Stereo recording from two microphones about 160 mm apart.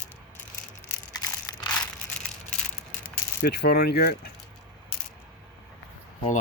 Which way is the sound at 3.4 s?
85° left.